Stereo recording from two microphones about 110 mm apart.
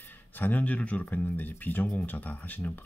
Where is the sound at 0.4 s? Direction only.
15° left (ahead or behind).